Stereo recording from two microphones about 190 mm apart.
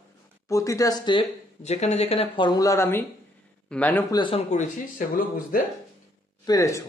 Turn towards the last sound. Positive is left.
turn(degrees=15)  # may be behind; listen again after turning